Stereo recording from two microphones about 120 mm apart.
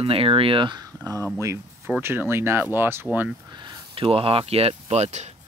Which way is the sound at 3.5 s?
35° right (ahead or behind).